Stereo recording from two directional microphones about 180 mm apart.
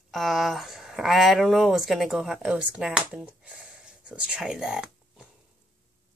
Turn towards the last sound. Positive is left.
turn(degrees=-5)  # may be behind; listen again after turning